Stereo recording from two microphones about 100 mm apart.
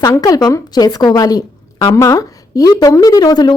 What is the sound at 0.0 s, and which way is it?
A woman's voice, 35° left (ahead or behind).